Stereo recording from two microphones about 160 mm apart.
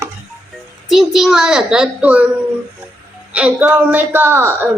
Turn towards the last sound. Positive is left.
turn(degrees=-15)  # may be behind; listen again after turning